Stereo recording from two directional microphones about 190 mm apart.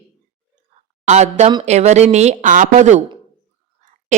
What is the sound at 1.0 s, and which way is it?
A woman's voice, 40° right (ahead or behind).